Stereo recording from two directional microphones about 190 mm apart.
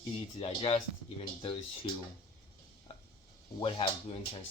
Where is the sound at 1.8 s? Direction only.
25° left (ahead or behind).